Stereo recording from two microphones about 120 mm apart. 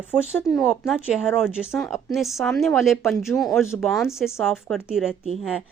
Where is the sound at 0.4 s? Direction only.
5° right (ahead or behind).